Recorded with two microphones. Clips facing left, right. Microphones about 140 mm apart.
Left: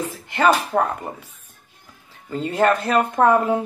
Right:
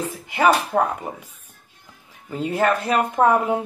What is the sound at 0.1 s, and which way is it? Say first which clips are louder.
Speech: even; 10° right (ahead or behind).